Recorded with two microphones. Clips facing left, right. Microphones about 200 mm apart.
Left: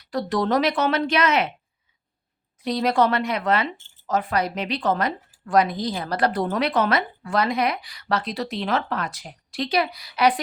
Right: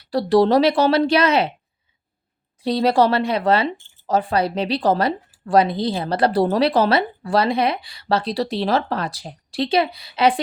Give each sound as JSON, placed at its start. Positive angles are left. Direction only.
{"t": 0.0, "sound": "speech", "side_deg": -30}
{"t": 2.6, "sound": "speech", "side_deg": -30}